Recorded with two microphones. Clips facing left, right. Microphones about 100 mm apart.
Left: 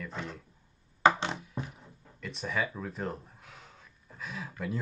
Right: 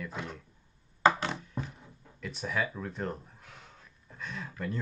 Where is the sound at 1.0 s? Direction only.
20° left (ahead or behind).